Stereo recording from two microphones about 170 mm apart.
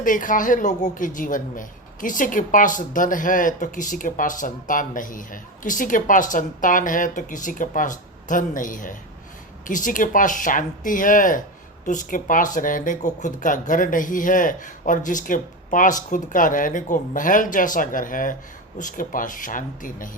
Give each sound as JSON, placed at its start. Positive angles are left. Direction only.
{"t": 0.0, "sound": "a woman's voice", "side_deg": 50}